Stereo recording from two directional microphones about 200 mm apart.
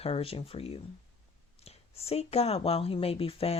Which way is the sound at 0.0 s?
30° left (ahead or behind).